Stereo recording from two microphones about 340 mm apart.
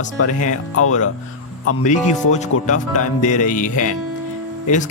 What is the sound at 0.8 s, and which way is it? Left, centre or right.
Speech, left.